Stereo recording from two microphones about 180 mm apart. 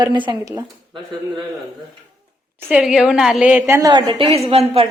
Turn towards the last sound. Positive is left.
turn(degrees=-35)  # may be behind; listen again after turning